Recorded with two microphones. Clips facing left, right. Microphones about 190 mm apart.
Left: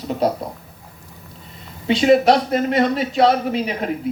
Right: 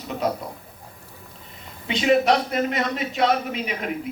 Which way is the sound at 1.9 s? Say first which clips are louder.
Left 5 dB; 35° left (ahead or behind).